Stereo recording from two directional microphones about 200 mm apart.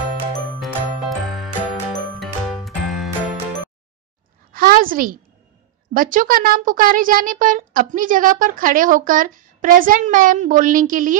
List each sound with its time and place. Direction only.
0.6 s music: 5° right (ahead or behind)
4.5 s a sound: 45° right (ahead or behind)
5.9 s speech: 45° right (ahead or behind)